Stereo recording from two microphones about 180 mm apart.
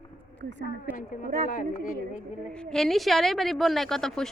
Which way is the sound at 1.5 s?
50° left (ahead or behind).